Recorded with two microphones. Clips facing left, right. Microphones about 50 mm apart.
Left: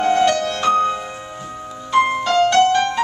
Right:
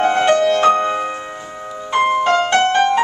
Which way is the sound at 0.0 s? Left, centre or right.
Right.